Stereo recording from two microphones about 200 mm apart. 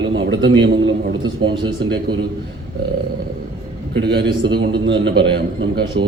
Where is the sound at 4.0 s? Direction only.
55° right (ahead or behind).